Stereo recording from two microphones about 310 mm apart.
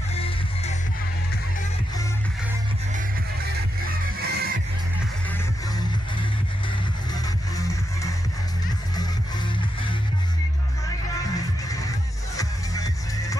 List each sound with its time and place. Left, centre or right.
0.1 s music: centre
3.8 s music: right
7.5 s music: centre
11.3 s music: centre